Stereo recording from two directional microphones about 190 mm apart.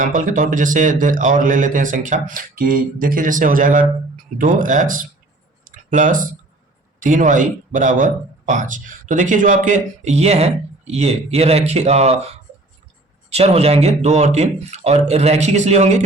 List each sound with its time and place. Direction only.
0.0 s a man's voice: 45° right (ahead or behind)
5.6 s a sound: 45° right (ahead or behind)
7.0 s speech: 45° right (ahead or behind)
13.3 s speech: 30° right (ahead or behind)